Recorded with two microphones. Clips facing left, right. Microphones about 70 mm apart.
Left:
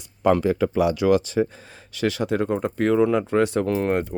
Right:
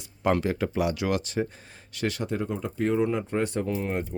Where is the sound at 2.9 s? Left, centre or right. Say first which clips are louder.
Left 6 dB; left.